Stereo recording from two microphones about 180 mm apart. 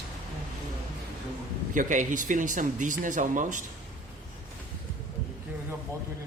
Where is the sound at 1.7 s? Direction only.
45° right (ahead or behind).